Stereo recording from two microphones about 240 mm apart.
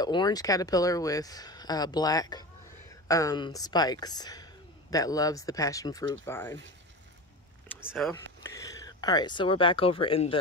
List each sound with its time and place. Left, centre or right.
0.0 s speech: centre
7.9 s speech: centre